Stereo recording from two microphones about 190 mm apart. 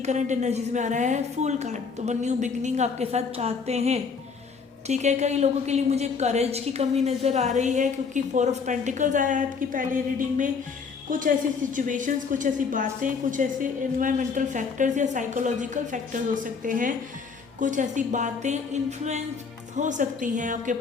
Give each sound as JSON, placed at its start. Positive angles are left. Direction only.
{"t": 0.0, "sound": "a woman's voice", "side_deg": -40}